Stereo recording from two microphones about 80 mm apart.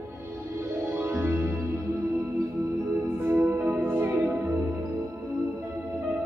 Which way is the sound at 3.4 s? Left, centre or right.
Centre.